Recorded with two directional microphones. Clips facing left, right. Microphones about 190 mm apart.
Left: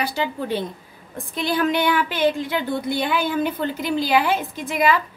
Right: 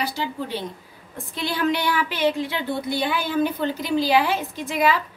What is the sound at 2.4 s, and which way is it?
A woman's voice, 50° left (ahead or behind).